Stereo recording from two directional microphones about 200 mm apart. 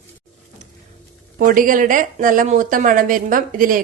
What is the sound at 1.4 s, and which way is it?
Speech, 45° right (ahead or behind).